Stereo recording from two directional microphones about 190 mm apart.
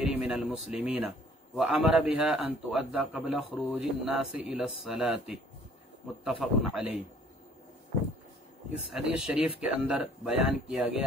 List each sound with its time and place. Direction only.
0.0 s a sound: 5° right (ahead or behind)
0.7 s a man's voice: 5° right (ahead or behind)
6.4 s a man's voice: 5° right (ahead or behind)
8.9 s a man's voice: 5° right (ahead or behind)